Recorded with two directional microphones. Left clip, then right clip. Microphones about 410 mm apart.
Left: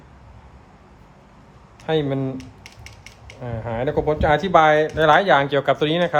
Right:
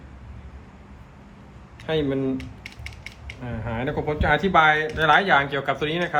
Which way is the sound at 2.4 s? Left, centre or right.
Centre.